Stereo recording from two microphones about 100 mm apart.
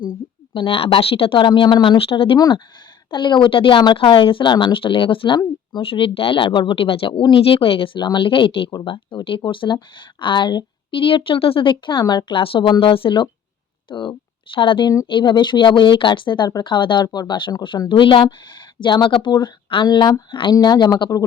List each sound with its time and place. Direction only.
0.5 s speech: 55° left (ahead or behind)
2.0 s speech: 65° left (ahead or behind)
3.1 s speech: 50° left (ahead or behind)
7.9 s speech: 50° left (ahead or behind)